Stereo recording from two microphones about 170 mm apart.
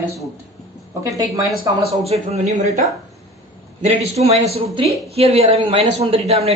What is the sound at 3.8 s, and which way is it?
Speech, 40° right (ahead or behind).